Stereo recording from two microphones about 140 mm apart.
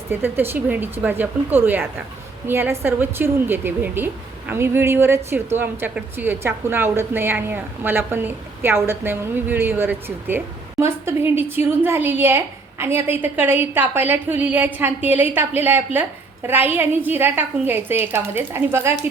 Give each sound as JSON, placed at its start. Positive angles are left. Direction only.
{"t": 0.1, "sound": "a woman's voice", "side_deg": -15}